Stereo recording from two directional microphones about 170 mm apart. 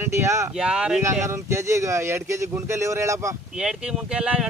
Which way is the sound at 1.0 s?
15° right (ahead or behind).